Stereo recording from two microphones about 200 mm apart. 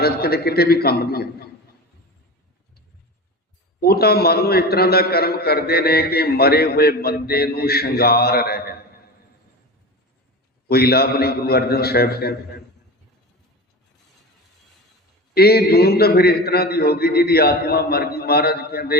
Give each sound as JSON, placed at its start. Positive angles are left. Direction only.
{"t": 0.0, "sound": "a man's voice", "side_deg": 50}
{"t": 3.8, "sound": "a man's voice", "side_deg": 50}
{"t": 10.7, "sound": "a man's voice", "side_deg": 50}
{"t": 15.4, "sound": "a man's voice", "side_deg": 50}